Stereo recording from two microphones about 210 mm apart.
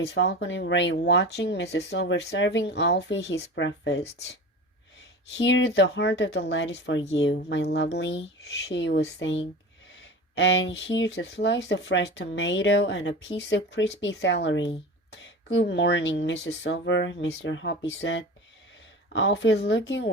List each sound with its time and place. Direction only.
0.0 s speech: 55° left (ahead or behind)
5.4 s speech: 60° left (ahead or behind)